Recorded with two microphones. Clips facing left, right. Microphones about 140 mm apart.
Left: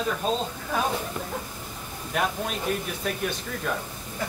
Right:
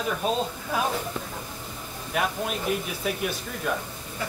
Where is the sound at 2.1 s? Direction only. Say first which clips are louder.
Even; 5° right (ahead or behind).